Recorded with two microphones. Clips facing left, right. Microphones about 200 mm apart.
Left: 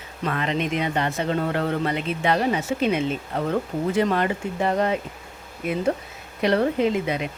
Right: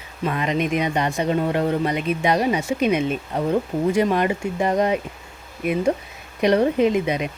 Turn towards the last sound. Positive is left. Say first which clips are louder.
# right 3 dB
turn(degrees=-20)  # may be behind; listen again after turning